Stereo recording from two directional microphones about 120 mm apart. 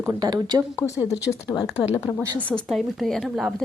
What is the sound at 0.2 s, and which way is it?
Speech, 35° right (ahead or behind).